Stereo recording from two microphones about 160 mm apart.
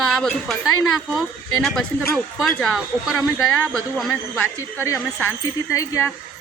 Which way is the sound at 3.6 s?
Centre (ahead or behind).